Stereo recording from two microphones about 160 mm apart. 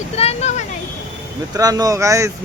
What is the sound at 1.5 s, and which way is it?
Speech, 20° right (ahead or behind).